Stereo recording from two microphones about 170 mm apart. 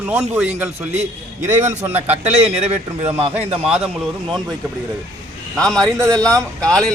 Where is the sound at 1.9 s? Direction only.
40° right (ahead or behind).